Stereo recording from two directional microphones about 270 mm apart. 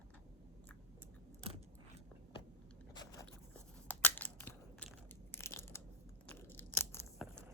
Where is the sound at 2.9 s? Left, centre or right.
Centre.